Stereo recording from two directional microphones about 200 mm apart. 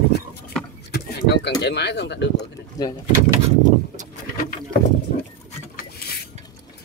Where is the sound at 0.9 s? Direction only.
55° left (ahead or behind).